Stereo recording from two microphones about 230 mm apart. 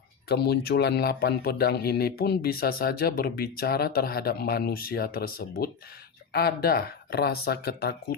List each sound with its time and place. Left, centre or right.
0.3 s a man's voice: left